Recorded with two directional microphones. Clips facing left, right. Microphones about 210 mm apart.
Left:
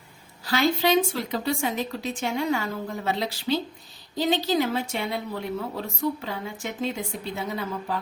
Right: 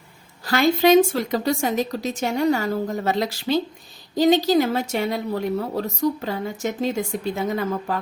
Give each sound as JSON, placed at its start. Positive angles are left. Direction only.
{"t": 0.4, "sound": "a woman's voice", "side_deg": -50}